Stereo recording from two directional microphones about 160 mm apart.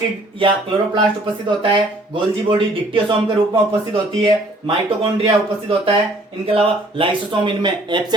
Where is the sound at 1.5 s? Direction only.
30° right (ahead or behind).